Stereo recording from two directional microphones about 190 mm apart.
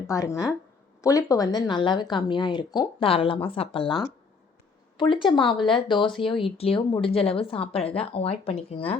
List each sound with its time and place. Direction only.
0.1 s speech: 15° left (ahead or behind)